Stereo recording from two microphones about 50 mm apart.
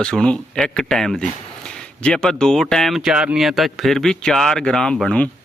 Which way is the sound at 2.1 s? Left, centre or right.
Centre.